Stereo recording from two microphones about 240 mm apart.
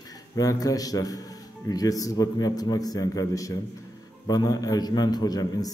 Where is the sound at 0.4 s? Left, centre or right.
Centre.